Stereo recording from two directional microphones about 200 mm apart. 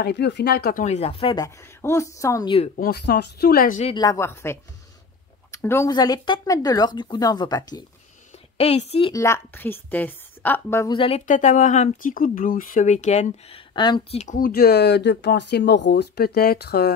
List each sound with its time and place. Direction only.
0.0 s speech: 55° left (ahead or behind); by 2.5 s 15° left (ahead or behind)
2.7 s speech: 50° left (ahead or behind)
3.8 s a woman's voice: 20° left (ahead or behind)
8.5 s speech: 30° left (ahead or behind)
9.1 s a woman's voice: 15° left (ahead or behind)
11.0 s speech: 30° left (ahead or behind)
14.2 s speech: 45° left (ahead or behind)